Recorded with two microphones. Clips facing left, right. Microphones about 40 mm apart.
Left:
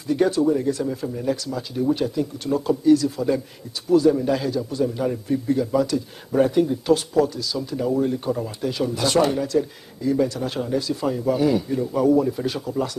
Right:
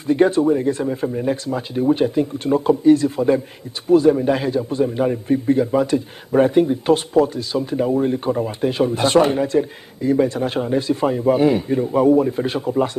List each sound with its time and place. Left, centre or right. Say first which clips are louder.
0.0 s speech: right 4 dB; right